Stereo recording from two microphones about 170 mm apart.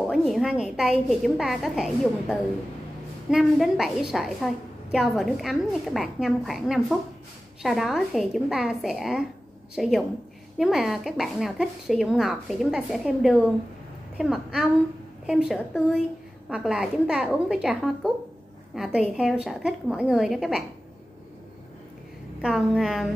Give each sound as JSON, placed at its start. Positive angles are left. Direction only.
{"t": 0.0, "sound": "speech", "side_deg": 0}
{"t": 22.4, "sound": "speech", "side_deg": 0}